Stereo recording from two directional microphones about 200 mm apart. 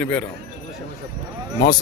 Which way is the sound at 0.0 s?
5° left (ahead or behind).